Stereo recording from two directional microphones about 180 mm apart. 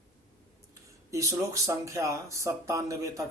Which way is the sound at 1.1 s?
15° right (ahead or behind).